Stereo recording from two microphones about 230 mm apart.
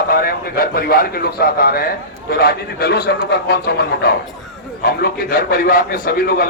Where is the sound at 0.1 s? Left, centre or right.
Left.